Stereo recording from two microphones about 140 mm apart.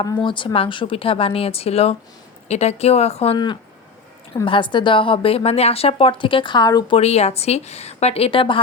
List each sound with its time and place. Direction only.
0.0 s a woman's voice: 35° left (ahead or behind)
3.3 s a woman's voice: 30° left (ahead or behind)
6.9 s a woman's voice: 50° left (ahead or behind)